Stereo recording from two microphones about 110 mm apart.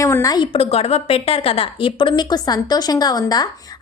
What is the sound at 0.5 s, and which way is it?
Speech, 65° left (ahead or behind).